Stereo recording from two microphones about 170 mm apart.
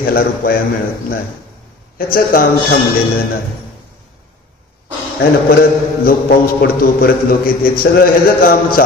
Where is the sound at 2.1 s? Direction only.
60° left (ahead or behind).